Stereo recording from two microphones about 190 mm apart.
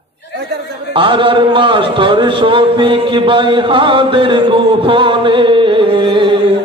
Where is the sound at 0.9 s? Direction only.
25° right (ahead or behind).